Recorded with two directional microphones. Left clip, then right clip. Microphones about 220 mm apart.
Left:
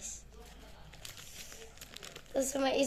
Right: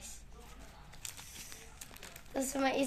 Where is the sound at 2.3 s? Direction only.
30° right (ahead or behind).